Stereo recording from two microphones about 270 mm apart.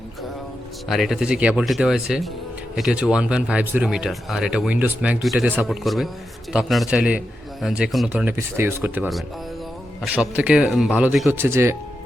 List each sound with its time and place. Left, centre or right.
0.9 s speech: centre